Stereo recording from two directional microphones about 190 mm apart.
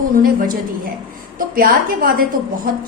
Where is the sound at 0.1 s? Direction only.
45° right (ahead or behind).